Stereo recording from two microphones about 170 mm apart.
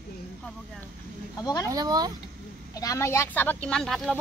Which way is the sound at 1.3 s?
20° left (ahead or behind).